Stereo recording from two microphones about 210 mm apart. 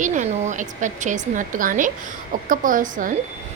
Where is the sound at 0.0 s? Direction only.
35° right (ahead or behind).